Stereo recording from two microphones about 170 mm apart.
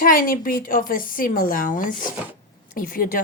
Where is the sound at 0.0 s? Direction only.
55° left (ahead or behind).